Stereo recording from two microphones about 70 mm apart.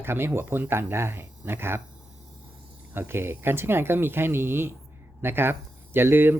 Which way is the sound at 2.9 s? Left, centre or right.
Right.